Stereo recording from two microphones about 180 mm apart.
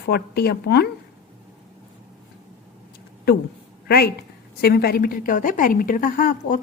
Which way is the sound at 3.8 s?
60° left (ahead or behind).